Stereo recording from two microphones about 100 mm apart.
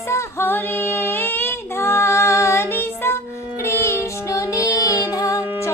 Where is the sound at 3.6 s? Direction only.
30° left (ahead or behind).